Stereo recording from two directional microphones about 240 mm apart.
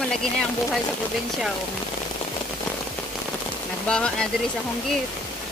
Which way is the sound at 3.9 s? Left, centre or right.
Centre.